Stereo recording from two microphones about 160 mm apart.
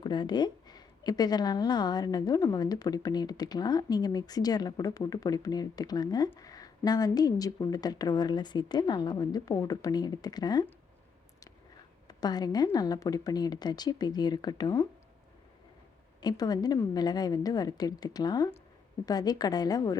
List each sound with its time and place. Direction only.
0.0 s speech: 30° left (ahead or behind)
12.0 s speech: 25° left (ahead or behind)
16.2 s speech: 25° left (ahead or behind)